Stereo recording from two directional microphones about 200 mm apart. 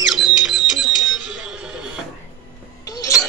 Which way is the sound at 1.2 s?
5° right (ahead or behind).